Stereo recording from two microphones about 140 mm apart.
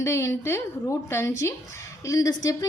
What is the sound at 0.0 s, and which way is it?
A woman's voice, 20° left (ahead or behind).